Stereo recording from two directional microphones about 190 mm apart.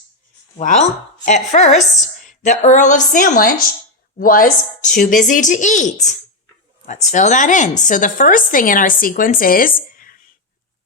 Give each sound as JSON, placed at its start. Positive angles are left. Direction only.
{"t": 0.5, "sound": "a woman's voice", "side_deg": 40}